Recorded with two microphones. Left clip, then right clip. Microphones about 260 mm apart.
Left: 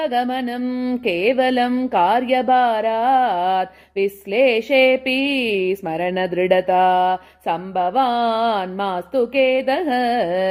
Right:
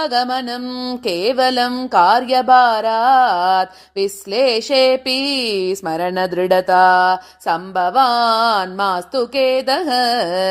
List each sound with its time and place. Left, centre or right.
0.0 s music: right